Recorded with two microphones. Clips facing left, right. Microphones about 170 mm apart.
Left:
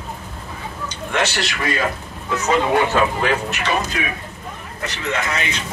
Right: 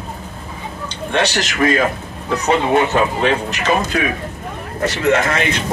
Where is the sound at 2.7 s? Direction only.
20° right (ahead or behind).